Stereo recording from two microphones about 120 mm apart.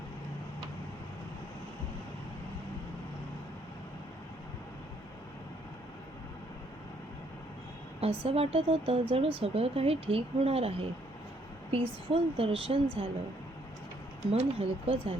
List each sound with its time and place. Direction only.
8.0 s speech: 50° right (ahead or behind)
14.3 s speech: 55° right (ahead or behind)